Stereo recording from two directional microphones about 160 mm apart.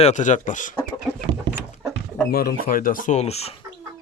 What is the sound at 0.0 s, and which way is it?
Speech, 50° left (ahead or behind).